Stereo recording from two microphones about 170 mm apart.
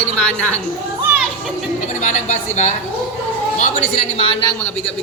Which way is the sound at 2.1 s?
45° left (ahead or behind).